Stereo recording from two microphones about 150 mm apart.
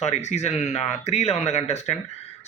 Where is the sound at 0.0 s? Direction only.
50° left (ahead or behind).